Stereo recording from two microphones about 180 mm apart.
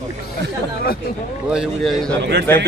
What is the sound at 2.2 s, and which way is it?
Speech, 70° right (ahead or behind).